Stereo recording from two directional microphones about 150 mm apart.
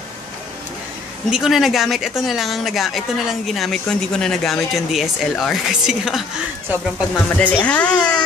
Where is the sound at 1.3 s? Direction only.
Centre (ahead or behind).